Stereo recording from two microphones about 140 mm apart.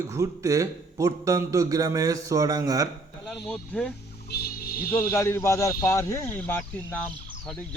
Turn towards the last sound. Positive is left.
turn(degrees=10)  # may be behind; listen again after turning